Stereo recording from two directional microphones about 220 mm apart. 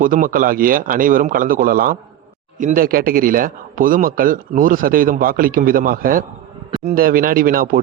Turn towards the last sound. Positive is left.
turn(degrees=-40)  # may be behind; listen again after turning